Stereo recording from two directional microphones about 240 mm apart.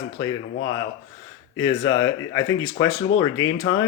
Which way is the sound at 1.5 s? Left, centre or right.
Centre.